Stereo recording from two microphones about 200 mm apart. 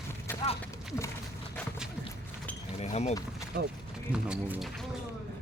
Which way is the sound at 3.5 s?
50° right (ahead or behind).